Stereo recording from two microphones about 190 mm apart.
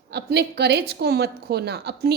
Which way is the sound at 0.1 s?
60° right (ahead or behind).